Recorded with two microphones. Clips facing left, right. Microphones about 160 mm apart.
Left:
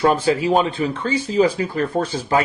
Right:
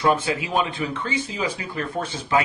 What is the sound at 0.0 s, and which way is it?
Speech, 35° left (ahead or behind).